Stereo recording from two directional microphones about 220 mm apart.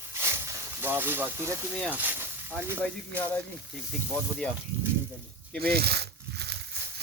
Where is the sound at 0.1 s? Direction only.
10° right (ahead or behind).